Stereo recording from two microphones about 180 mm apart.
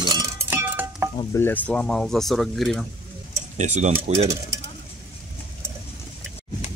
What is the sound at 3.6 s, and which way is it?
Speech, 40° right (ahead or behind).